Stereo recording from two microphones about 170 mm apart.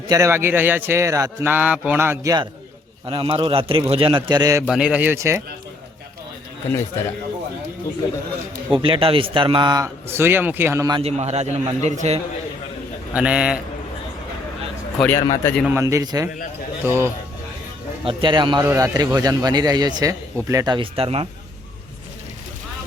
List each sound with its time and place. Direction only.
0.1 s a man's voice: 15° right (ahead or behind)
4.7 s a man's voice: 5° right (ahead or behind)
6.7 s a man's voice: 15° left (ahead or behind)
8.7 s a man's voice: 30° right (ahead or behind)
11.0 s a man's voice: 40° right (ahead or behind)
13.1 s a man's voice: 5° right (ahead or behind)
14.9 s a man's voice: 10° left (ahead or behind)
15.6 s a man's voice: 15° right (ahead or behind)
18.0 s a man's voice: 30° right (ahead or behind)
18.6 s a man's voice: 15° right (ahead or behind); by 21.2 s 35° right (ahead or behind)